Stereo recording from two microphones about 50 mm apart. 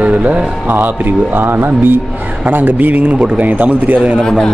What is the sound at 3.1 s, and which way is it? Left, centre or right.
Speech, right.